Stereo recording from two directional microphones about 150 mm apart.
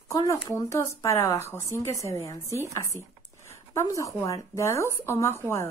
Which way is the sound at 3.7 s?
20° left (ahead or behind).